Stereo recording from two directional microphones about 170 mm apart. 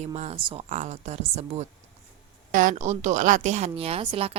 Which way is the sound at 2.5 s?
50° right (ahead or behind).